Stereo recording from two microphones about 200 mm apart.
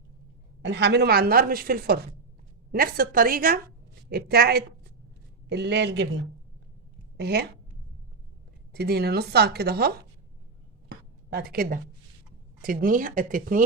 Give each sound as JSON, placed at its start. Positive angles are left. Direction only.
{"t": 0.6, "sound": "a woman's voice", "side_deg": -60}
{"t": 7.2, "sound": "a woman's voice", "side_deg": -55}
{"t": 8.7, "sound": "a woman's voice", "side_deg": -55}
{"t": 10.8, "sound": "a sound", "side_deg": -55}
{"t": 12.6, "sound": "a woman's voice", "side_deg": -45}